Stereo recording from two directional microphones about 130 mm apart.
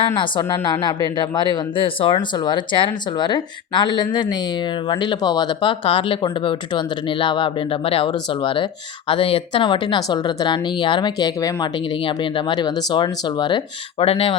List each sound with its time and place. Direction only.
0.4 s speech: 30° left (ahead or behind)
12.0 s speech: 40° left (ahead or behind)
14.0 s speech: 45° left (ahead or behind)